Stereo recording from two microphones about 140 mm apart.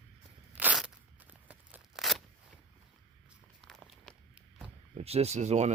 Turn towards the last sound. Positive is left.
turn(degrees=-55)  # may be behind; listen again after turning